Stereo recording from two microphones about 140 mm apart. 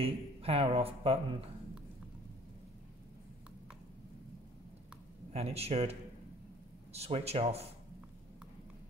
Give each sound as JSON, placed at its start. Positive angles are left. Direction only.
{"t": 0.0, "sound": "a man's voice", "side_deg": -45}
{"t": 5.3, "sound": "a man's voice", "side_deg": -45}